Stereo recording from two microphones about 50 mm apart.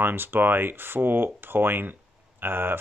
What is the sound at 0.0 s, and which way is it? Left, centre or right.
Speech, right.